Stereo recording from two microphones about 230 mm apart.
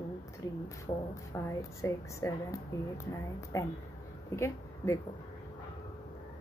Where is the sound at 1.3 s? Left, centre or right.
Centre.